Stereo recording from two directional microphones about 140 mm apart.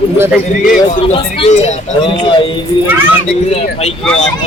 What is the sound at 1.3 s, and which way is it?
Speech, 50° left (ahead or behind).